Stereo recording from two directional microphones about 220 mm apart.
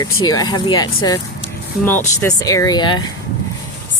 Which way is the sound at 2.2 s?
15° left (ahead or behind).